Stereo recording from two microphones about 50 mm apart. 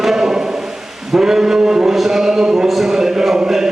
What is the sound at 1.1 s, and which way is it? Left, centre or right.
Chant, centre.